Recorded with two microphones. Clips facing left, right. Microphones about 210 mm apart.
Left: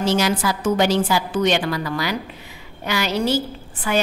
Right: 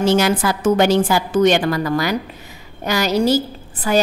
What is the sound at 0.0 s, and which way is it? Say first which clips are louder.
A woman's voice: right 4 dB; 55° right (ahead or behind).